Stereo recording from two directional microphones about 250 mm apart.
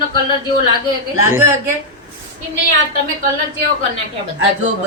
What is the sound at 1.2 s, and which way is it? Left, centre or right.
Speech, centre.